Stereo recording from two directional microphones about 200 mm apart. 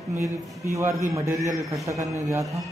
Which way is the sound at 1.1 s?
15° right (ahead or behind).